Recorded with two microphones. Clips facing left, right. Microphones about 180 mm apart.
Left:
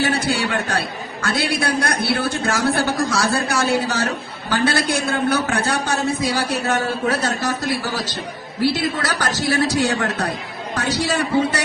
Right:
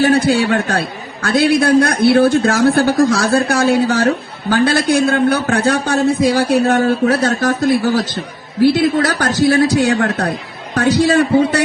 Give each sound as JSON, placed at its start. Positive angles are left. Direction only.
{"t": 0.0, "sound": "a man's voice", "side_deg": -55}
{"t": 8.6, "sound": "a man's voice", "side_deg": -55}